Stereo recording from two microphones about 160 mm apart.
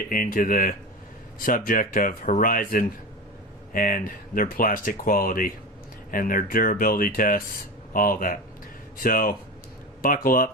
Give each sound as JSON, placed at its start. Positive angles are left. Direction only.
{"t": 0.1, "sound": "speech", "side_deg": 60}